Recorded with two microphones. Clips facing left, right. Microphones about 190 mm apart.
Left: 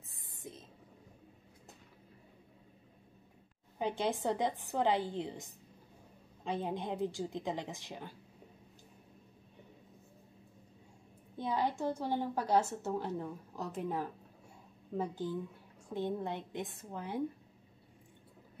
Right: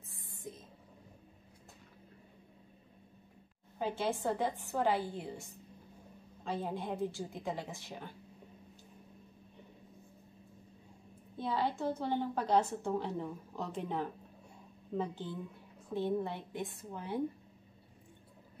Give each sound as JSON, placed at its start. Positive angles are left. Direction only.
{"t": 3.7, "sound": "a woman's voice", "side_deg": 15}
{"t": 11.3, "sound": "a woman's voice", "side_deg": 15}